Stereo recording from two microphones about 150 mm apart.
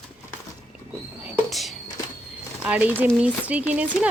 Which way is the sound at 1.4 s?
Centre (ahead or behind).